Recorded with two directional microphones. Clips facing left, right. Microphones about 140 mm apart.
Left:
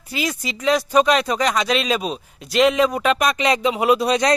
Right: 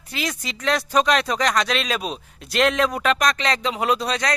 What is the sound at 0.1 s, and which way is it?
Speech, 5° left (ahead or behind).